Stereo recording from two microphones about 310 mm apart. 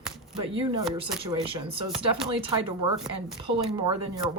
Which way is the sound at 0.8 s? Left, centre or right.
Centre.